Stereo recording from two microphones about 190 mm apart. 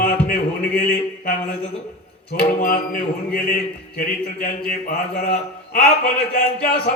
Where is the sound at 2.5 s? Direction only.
45° left (ahead or behind).